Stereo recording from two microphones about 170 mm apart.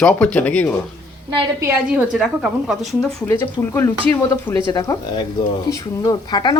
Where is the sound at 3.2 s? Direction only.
15° left (ahead or behind).